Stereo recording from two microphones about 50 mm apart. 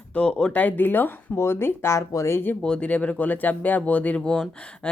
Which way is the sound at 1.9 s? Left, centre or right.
Left.